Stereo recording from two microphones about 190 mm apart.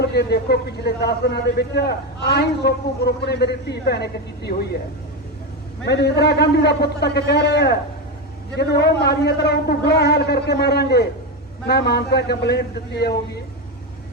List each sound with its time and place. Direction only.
0.0 s a man's voice: 60° left (ahead or behind)
5.8 s a man's voice: 60° left (ahead or behind)